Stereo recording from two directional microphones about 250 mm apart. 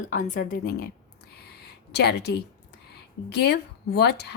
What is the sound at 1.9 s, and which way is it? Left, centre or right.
A woman's voice, left.